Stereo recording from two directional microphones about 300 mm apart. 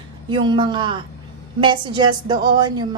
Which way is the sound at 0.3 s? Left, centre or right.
Centre.